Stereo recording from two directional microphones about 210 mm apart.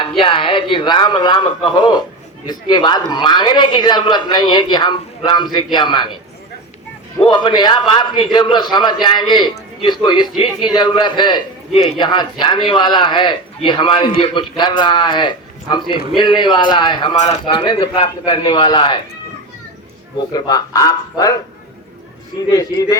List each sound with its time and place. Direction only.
0.2 s a man's voice: 25° left (ahead or behind)
7.2 s a man's voice: 20° left (ahead or behind)
20.3 s speech: 15° left (ahead or behind)
22.5 s speech: 15° left (ahead or behind)